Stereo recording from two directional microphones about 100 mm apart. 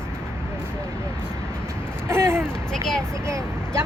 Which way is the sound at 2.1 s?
25° right (ahead or behind).